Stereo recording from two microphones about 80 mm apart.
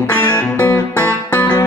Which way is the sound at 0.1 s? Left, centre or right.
Left.